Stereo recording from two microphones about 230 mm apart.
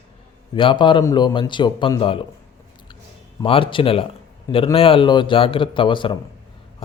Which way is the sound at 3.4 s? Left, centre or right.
Left.